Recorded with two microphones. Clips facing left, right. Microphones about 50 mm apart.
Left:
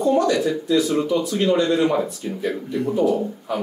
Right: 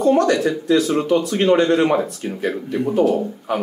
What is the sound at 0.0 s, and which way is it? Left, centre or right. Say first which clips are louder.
Speech: right 3 dB; right.